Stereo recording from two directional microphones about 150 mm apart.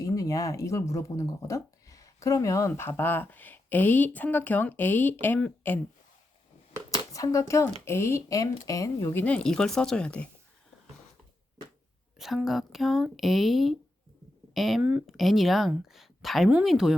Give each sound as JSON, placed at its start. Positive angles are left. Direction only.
{"t": 0.0, "sound": "speech", "side_deg": 25}
{"t": 6.9, "sound": "speech", "side_deg": 20}
{"t": 9.2, "sound": "speech", "side_deg": 5}
{"t": 12.1, "sound": "speech", "side_deg": 0}